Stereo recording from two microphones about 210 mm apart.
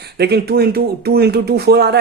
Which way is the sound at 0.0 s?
50° right (ahead or behind).